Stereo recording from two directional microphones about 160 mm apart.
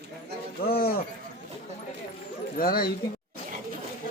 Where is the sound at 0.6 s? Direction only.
70° left (ahead or behind).